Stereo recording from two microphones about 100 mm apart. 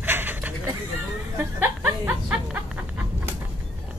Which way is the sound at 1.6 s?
20° right (ahead or behind).